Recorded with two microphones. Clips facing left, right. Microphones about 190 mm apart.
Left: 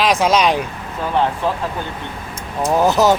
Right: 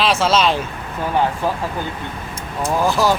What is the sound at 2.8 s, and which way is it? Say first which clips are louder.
Speech: left 3 dB; 20° left (ahead or behind).